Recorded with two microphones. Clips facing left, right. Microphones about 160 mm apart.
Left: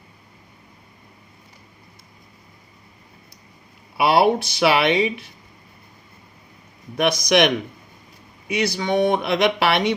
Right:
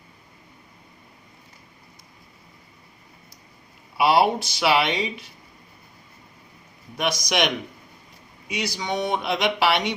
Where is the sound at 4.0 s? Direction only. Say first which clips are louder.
Left 2 dB; 60° left (ahead or behind).